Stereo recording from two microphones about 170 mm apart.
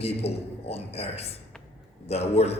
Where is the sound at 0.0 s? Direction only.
35° left (ahead or behind).